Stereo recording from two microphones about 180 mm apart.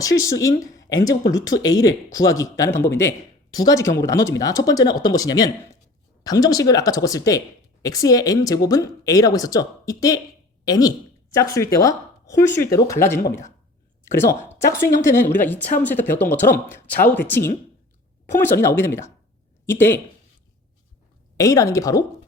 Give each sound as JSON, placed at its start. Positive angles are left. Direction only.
{"t": 0.0, "sound": "speech", "side_deg": 20}
{"t": 18.6, "sound": "speech", "side_deg": 15}
{"t": 21.3, "sound": "speech", "side_deg": 20}